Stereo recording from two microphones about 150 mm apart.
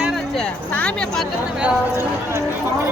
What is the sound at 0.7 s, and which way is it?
Speech, 5° left (ahead or behind).